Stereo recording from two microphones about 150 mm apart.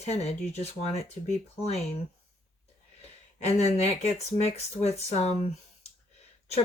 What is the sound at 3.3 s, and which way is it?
Speech, 45° left (ahead or behind).